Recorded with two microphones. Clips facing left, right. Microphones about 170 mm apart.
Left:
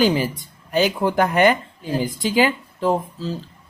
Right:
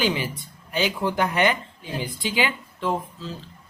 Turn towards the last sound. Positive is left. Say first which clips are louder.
# left 6 dB
turn(degrees=40)  # may be behind; listen again after turning